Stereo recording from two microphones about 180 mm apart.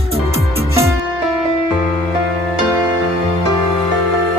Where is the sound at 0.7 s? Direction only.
15° right (ahead or behind).